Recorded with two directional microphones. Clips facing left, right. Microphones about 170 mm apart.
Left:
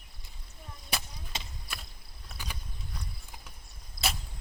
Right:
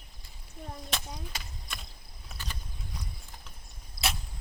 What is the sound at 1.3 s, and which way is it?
Chop, 25° left (ahead or behind).